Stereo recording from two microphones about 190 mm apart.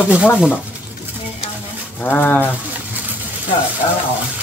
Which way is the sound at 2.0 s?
10° left (ahead or behind).